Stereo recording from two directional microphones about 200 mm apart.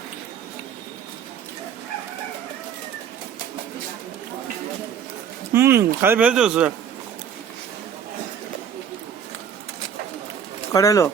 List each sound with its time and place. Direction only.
5.5 s speech: 10° right (ahead or behind)
10.7 s speech: 15° left (ahead or behind)